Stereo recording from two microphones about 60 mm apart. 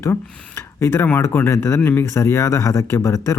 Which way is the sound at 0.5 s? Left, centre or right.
Left.